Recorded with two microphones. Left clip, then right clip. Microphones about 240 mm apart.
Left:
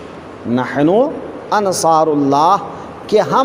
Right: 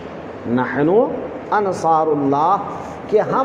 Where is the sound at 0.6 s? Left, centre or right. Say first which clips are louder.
Left 2 dB; left.